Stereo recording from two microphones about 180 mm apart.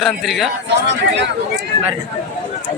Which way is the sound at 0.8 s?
80° right.